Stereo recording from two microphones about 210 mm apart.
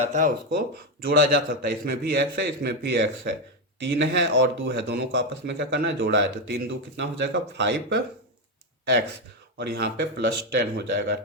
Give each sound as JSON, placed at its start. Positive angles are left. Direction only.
{"t": 0.0, "sound": "speech", "side_deg": -35}
{"t": 1.0, "sound": "a man's voice", "side_deg": -50}
{"t": 9.6, "sound": "speech", "side_deg": -50}